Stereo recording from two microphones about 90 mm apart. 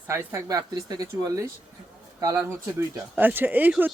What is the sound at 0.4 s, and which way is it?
Speech, 45° right (ahead or behind).